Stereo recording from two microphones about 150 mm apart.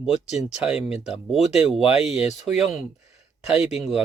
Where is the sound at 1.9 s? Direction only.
45° left (ahead or behind).